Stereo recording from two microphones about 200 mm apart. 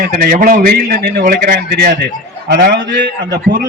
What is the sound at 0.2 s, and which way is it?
A man's voice, 45° right (ahead or behind).